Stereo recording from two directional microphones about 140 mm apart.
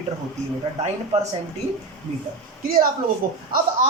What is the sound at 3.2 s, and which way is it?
Speech, 85° right.